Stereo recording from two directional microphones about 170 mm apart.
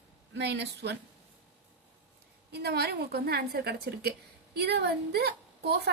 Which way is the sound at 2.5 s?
70° right (ahead or behind).